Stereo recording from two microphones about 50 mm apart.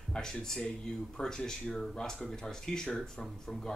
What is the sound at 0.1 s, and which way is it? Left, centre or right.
Speech, centre.